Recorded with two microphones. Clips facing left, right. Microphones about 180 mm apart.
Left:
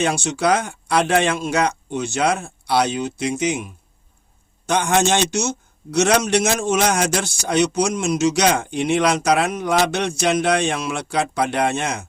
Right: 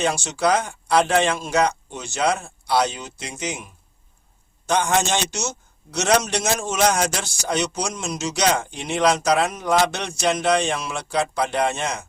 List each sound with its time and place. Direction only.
0.0 s speech: 60° left (ahead or behind)
4.7 s speech: 60° left (ahead or behind)